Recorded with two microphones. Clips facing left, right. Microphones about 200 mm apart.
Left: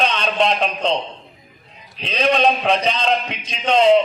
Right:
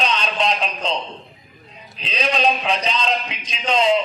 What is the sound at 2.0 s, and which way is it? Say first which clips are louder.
A man's voice: left 4 dB; 55° left (ahead or behind).